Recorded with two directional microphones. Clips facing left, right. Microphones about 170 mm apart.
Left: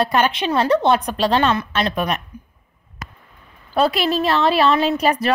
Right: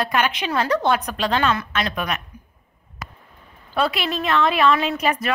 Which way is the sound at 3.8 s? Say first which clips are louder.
Left 5 dB; 40° left (ahead or behind).